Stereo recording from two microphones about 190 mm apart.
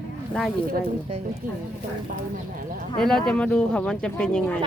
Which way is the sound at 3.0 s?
5° left (ahead or behind).